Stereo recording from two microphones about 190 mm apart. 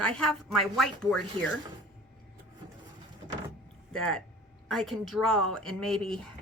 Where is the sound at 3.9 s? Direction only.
5° left (ahead or behind).